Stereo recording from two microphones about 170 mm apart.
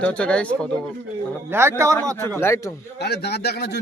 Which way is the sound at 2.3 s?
15° left (ahead or behind).